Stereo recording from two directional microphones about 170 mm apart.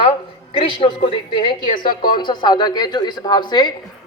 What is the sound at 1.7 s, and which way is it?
Speech, 55° left (ahead or behind).